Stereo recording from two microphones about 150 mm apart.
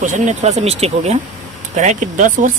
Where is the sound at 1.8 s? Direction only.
55° right (ahead or behind).